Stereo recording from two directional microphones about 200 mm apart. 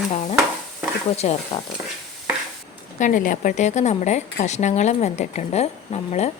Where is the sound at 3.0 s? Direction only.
40° left (ahead or behind).